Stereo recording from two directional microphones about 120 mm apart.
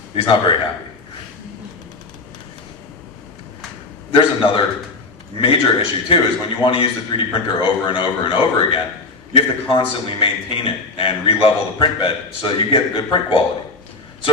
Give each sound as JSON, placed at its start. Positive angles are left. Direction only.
{"t": 0.2, "sound": "a man's voice", "side_deg": 45}
{"t": 4.1, "sound": "a man's voice", "side_deg": 45}